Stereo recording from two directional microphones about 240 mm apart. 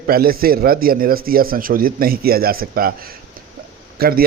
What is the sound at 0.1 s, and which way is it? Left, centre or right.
A man's voice, right.